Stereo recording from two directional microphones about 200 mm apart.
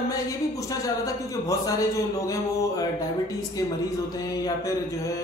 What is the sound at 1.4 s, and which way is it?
A woman's voice, 15° left (ahead or behind).